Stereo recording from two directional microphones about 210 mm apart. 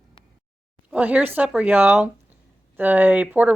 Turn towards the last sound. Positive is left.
turn(degrees=-5)  # may be behind; listen again after turning